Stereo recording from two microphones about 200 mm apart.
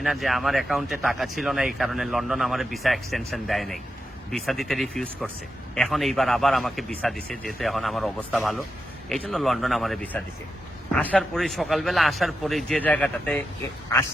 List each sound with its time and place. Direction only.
0.0 s speech: centre (ahead or behind)